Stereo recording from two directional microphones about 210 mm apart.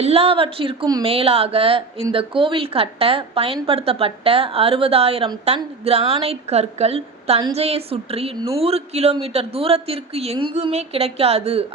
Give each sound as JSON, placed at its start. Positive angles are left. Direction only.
{"t": 0.0, "sound": "speech", "side_deg": -30}